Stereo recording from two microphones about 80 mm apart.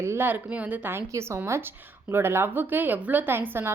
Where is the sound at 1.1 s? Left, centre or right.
Right.